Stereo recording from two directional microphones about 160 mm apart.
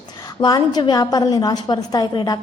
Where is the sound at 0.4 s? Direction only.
25° left (ahead or behind).